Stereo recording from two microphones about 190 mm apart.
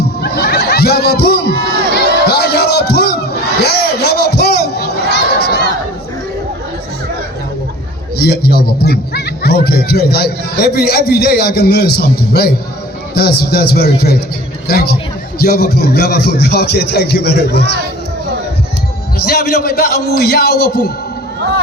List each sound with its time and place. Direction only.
0.2 s crowd: 55° left (ahead or behind)
5.4 s battle cry: 55° left (ahead or behind)
8.2 s a man's voice: 55° left (ahead or behind)
19.2 s a man's voice: 55° left (ahead or behind)